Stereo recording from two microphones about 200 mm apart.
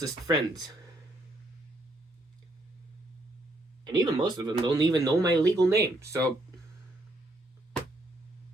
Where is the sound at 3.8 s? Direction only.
20° right (ahead or behind).